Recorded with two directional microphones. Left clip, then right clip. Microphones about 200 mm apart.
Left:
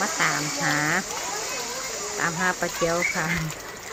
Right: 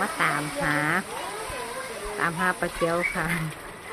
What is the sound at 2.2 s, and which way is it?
Speech, 10° right (ahead or behind).